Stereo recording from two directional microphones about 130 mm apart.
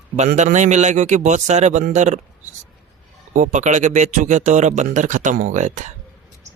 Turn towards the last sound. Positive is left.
turn(degrees=-70)  # may be behind; listen again after turning